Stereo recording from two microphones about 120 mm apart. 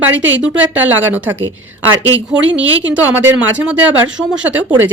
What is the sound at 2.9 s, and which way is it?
Speech, 15° right (ahead or behind).